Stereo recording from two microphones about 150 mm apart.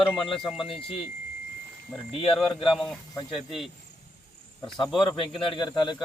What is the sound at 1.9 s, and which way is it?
Speech, 5° left (ahead or behind).